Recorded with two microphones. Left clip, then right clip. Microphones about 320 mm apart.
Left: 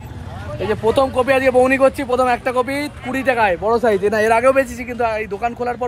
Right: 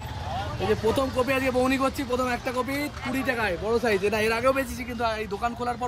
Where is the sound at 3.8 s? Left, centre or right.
Left.